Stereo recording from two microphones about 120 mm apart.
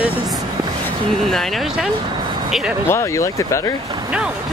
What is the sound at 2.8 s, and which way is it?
Speech, 20° left (ahead or behind).